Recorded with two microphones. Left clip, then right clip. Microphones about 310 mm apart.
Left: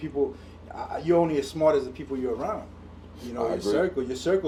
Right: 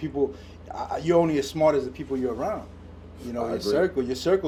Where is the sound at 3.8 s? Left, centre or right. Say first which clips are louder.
Right 2 dB; right.